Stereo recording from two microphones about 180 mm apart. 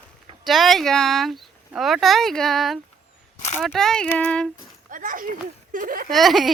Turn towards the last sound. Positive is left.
turn(degrees=0)  # may be behind; listen again after turning